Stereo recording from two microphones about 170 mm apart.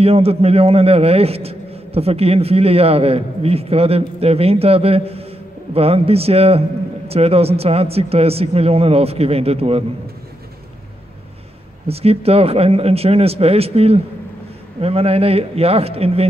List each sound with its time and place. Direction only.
0.0 s a man's voice: 35° right (ahead or behind)
11.9 s a man's voice: 35° right (ahead or behind)